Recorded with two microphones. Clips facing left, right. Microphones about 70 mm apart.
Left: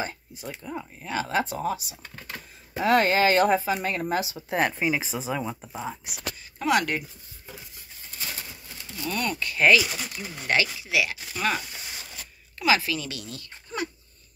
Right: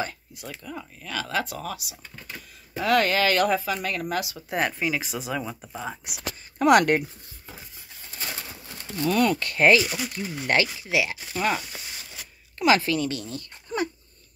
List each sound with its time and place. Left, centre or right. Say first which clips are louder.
0.7 s speech: left 4 dB; left
2.0 s a sound: left 2 dB; left
2.8 s speech: left 1 dB; left
5.3 s speech: left 1 dB; centre
6.6 s speech: right 6 dB; right
8.2 s bird: right 2 dB; right
9.1 s speech: right 6 dB; right
9.6 s speech: right 1 dB; right
9.8 s speech: right 3 dB; centre
10.4 s speech: right 1 dB; right
12.5 s speech: right 3 dB; right